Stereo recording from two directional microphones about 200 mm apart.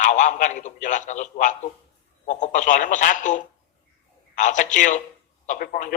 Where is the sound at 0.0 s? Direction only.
40° left (ahead or behind).